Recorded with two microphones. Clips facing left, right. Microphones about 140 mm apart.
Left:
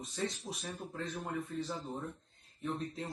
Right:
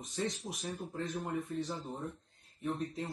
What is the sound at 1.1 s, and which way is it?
Speech, 15° right (ahead or behind).